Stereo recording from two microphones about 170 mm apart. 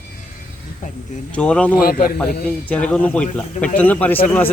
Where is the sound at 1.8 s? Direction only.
60° left (ahead or behind).